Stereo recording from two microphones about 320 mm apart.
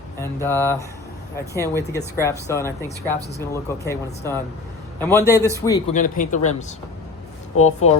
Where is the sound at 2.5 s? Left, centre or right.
Centre.